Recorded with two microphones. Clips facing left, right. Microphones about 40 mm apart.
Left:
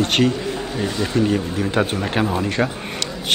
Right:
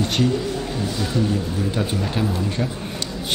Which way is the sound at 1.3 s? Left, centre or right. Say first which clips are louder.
Left 4 dB; left.